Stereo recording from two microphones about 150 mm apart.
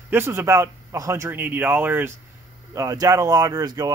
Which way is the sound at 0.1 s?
15° right (ahead or behind).